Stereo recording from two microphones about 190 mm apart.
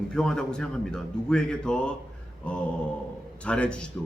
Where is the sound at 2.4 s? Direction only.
5° left (ahead or behind).